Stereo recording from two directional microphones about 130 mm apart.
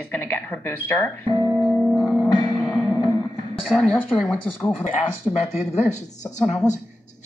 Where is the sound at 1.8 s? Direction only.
Centre (ahead or behind).